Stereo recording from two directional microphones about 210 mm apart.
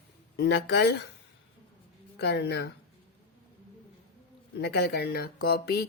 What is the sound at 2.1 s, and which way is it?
Speech, 55° left (ahead or behind).